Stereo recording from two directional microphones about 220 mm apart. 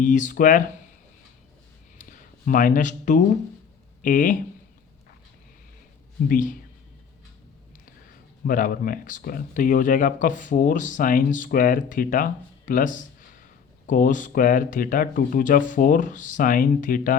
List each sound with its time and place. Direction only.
0.0 s speech: 35° left (ahead or behind)
2.0 s a sound: 35° left (ahead or behind)
4.0 s speech: 35° left (ahead or behind)
6.2 s speech: 40° left (ahead or behind)
8.4 s speech: 40° left (ahead or behind)